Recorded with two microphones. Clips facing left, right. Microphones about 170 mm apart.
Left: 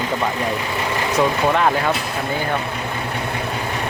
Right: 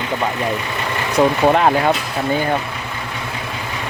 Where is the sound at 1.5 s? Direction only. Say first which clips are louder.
Right 3 dB; 35° right (ahead or behind).